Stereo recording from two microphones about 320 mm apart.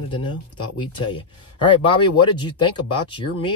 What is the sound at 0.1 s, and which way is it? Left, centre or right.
Speech, centre.